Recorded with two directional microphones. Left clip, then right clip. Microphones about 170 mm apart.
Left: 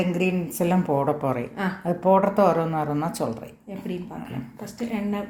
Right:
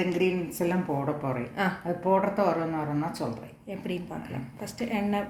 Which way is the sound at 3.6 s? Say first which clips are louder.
Even; 5° right (ahead or behind).